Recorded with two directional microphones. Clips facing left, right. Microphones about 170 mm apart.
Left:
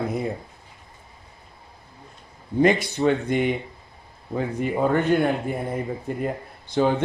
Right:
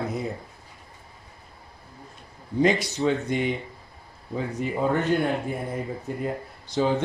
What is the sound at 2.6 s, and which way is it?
Speech, 55° left (ahead or behind).